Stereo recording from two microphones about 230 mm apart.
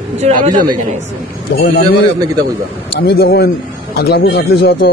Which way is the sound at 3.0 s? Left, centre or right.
Left.